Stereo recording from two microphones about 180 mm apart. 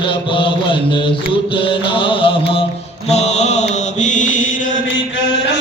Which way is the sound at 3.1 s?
40° left (ahead or behind).